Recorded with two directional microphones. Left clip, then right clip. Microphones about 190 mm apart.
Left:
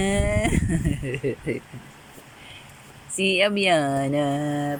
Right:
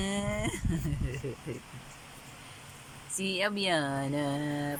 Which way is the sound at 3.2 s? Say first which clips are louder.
Left 11 dB; 10° left (ahead or behind).